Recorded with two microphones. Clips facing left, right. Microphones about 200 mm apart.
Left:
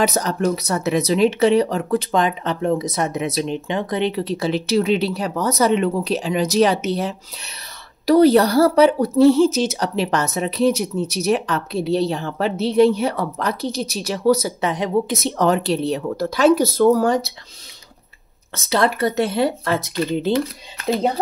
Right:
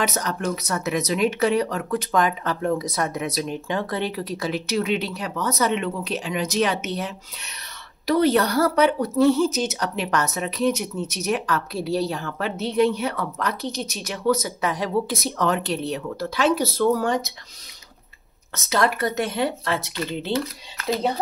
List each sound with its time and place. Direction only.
0.0 s a woman's voice: 35° left (ahead or behind)
18.5 s a woman's voice: 30° left (ahead or behind)